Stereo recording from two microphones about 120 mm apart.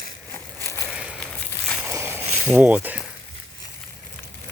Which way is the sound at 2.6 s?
15° right (ahead or behind).